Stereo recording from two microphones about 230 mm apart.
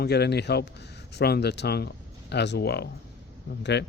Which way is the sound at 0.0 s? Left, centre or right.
Left.